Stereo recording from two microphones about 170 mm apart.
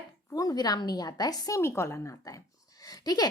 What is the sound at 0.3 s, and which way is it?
A woman's voice, 20° left (ahead or behind).